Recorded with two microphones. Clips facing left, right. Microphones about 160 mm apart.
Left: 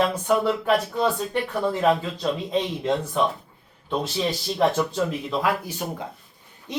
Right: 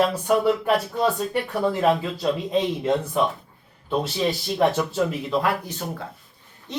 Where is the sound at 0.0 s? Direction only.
5° right (ahead or behind).